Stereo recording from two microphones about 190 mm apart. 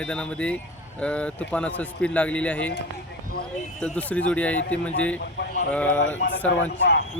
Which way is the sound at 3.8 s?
5° left (ahead or behind).